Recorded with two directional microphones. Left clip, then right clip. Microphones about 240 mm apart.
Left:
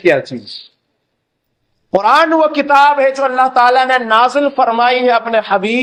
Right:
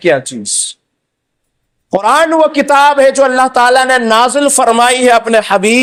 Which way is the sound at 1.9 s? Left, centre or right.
Right.